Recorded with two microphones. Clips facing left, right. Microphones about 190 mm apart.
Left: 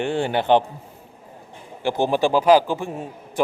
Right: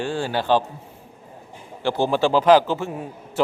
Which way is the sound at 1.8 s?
15° left (ahead or behind).